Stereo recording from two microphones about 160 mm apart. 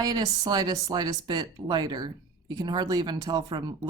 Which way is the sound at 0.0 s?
25° right (ahead or behind).